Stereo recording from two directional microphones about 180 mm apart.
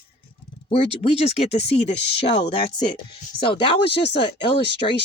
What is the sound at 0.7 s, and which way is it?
Speech, 35° left (ahead or behind).